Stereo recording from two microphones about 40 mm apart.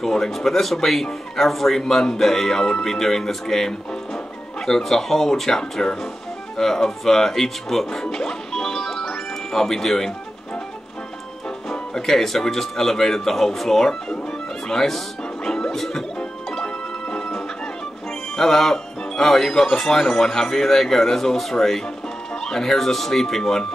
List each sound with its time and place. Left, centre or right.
0.0 s speech: centre
11.7 s speech: centre
15.4 s music: centre
16.4 s music: centre
18.3 s speech: centre